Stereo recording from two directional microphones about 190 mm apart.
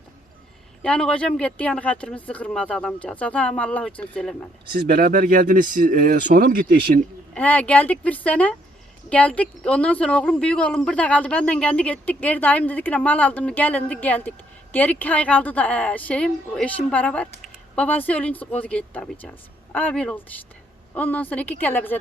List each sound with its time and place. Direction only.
0.8 s speech: 5° left (ahead or behind)
4.7 s speech: 50° right (ahead or behind)
7.3 s speech: 10° left (ahead or behind)